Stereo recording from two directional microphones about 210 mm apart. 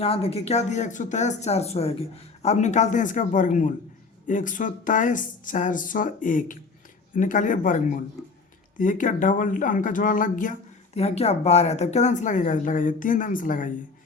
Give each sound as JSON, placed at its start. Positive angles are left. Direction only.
{"t": 0.0, "sound": "speech", "side_deg": 30}